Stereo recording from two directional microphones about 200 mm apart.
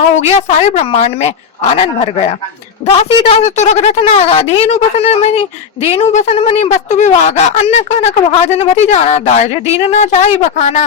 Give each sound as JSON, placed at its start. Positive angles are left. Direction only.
{"t": 0.2, "sound": "a woman's voice", "side_deg": 35}